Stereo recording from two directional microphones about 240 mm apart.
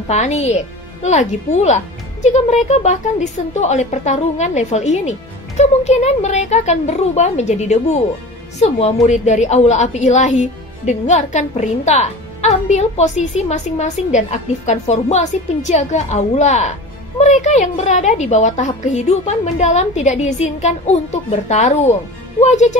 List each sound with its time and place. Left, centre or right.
0.1 s a woman's voice: left